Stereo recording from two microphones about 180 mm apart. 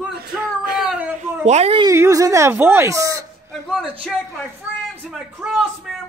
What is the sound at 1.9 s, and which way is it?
Speech, 15° right (ahead or behind).